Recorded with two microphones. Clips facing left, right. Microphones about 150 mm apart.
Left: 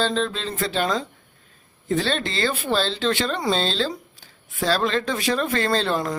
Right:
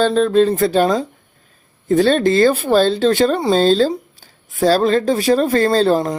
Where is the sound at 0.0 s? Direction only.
50° right (ahead or behind).